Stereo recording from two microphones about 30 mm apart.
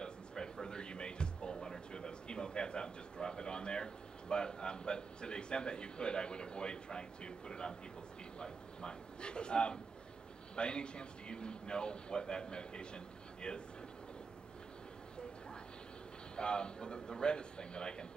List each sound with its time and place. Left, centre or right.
0.0 s music: left
1.9 s a sound: left
8.4 s speech: left
16.3 s speech: left